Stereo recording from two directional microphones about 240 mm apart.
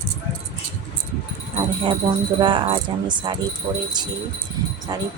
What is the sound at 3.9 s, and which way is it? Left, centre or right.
Speech, centre.